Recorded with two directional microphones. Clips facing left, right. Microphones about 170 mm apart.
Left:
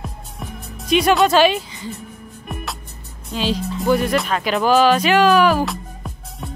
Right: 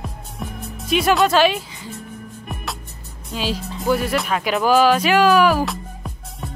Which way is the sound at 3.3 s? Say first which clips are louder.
Left 3 dB; 5° right (ahead or behind).